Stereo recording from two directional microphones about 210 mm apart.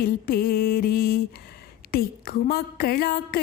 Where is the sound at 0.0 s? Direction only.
45° left (ahead or behind).